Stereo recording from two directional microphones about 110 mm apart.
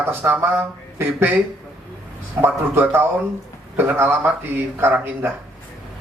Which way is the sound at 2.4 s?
20° right (ahead or behind).